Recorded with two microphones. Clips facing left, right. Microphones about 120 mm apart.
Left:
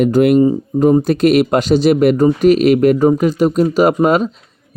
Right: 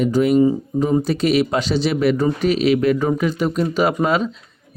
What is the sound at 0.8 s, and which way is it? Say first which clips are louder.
Speech: left 7 dB; 50° left (ahead or behind).